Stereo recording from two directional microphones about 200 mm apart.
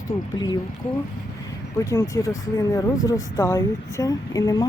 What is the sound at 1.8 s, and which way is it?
Speech, 15° left (ahead or behind).